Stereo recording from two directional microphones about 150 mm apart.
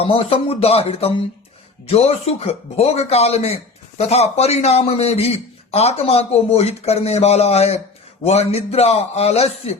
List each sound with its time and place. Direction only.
0.0 s speech: 40° left (ahead or behind)